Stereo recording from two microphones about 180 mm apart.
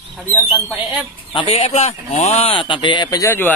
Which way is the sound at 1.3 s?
35° left (ahead or behind).